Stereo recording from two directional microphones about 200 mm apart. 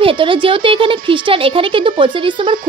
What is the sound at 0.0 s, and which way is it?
Speech, 25° right (ahead or behind).